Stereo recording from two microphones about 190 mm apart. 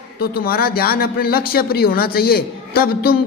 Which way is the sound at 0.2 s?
55° left (ahead or behind).